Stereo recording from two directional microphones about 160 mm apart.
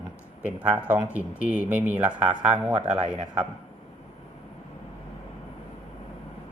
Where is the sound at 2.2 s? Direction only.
45° right (ahead or behind).